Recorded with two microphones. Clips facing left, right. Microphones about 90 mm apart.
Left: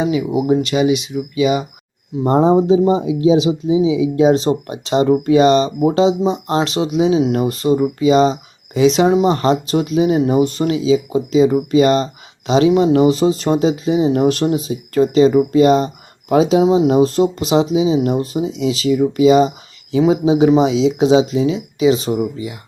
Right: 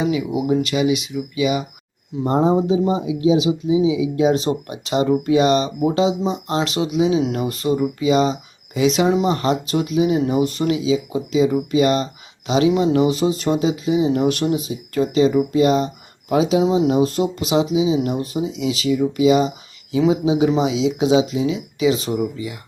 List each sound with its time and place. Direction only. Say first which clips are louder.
0.0 s speech: left 3 dB; 40° left (ahead or behind)
13.1 s speech: left 4 dB; 30° left (ahead or behind)
18.9 s speech: left 4 dB; 45° left (ahead or behind); by 22.5 s 25° left (ahead or behind)